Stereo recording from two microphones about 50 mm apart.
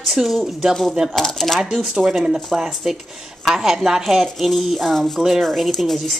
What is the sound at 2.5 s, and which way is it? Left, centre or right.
Speech, centre.